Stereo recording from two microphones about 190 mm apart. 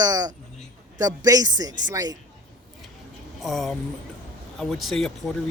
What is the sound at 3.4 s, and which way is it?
Speech, centre (ahead or behind).